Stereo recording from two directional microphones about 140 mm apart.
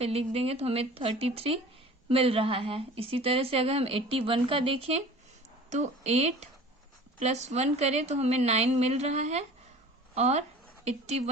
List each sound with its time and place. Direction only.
0.0 s a woman's voice: 45° right (ahead or behind)